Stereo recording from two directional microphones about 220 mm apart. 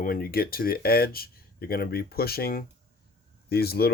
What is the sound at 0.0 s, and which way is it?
Speech, 40° left (ahead or behind).